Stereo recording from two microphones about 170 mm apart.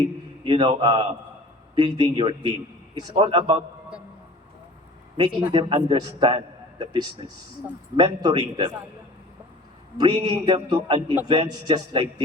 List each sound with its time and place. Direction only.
0.4 s a man's voice: 30° right (ahead or behind)
5.1 s a man's voice: 30° right (ahead or behind)
10.0 s a man's voice: 25° right (ahead or behind)